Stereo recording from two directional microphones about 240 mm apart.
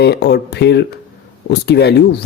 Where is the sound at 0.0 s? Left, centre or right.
Left.